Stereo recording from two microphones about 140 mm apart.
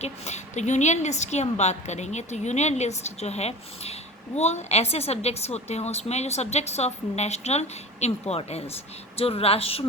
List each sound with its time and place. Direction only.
0.0 s a woman's voice: 55° left (ahead or behind)